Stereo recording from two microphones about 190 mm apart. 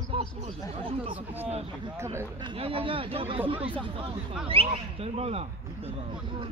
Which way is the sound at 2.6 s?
30° right (ahead or behind).